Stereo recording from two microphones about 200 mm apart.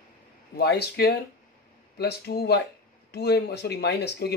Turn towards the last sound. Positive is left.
turn(degrees=55)  # may be behind; listen again after turning